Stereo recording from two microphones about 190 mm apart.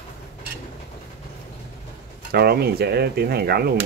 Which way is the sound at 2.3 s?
55° right (ahead or behind).